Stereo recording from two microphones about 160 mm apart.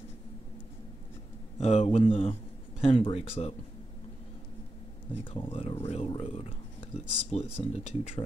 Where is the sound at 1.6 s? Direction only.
40° left (ahead or behind).